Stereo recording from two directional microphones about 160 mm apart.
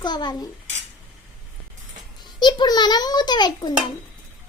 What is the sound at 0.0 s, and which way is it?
Speech, 25° left (ahead or behind).